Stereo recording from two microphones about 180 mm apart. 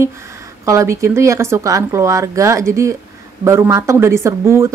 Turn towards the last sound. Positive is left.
turn(degrees=-15)  # may be behind; listen again after turning